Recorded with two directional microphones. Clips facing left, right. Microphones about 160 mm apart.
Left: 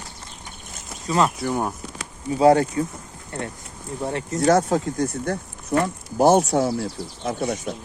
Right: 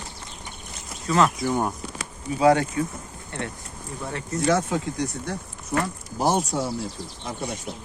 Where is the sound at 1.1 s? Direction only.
25° left (ahead or behind).